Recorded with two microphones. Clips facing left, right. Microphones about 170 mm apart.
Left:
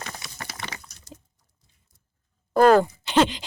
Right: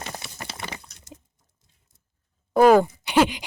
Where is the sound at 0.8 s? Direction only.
20° right (ahead or behind).